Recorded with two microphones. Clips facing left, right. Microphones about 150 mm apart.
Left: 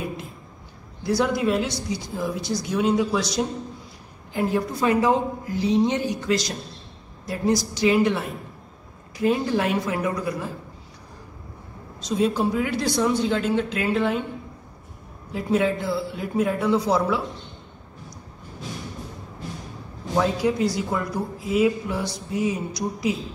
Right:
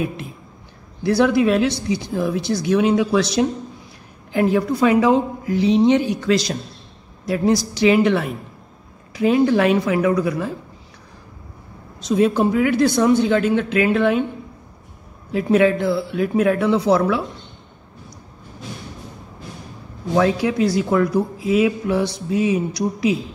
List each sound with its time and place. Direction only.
1.0 s speech: 70° right (ahead or behind)
4.3 s a woman's voice: 85° right
7.2 s a woman's voice: 85° right
12.2 s speech: 65° right (ahead or behind)
15.3 s speech: 75° right (ahead or behind)
20.2 s speech: 80° right